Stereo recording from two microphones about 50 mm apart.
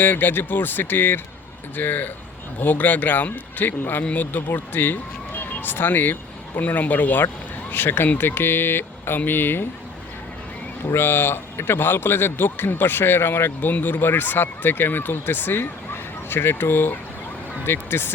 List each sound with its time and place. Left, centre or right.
0.0 s a man's voice: left
10.9 s a man's voice: left
13.6 s a man's voice: left